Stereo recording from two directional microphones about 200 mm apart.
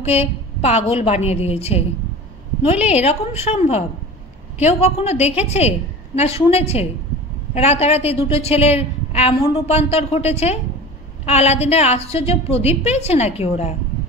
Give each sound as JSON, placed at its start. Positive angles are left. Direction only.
{"t": 0.0, "sound": "a woman's voice", "side_deg": 30}